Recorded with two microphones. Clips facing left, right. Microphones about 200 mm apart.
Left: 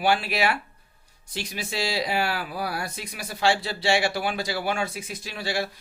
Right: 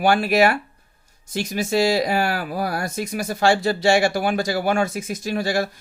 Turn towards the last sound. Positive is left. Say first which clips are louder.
# right 7 dB
turn(degrees=-45)  # may be behind; listen again after turning